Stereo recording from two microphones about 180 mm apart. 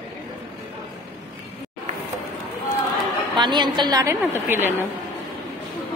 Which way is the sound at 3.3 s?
25° right (ahead or behind).